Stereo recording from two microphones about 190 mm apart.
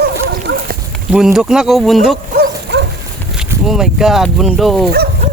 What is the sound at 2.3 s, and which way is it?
Dog, 65° right (ahead or behind).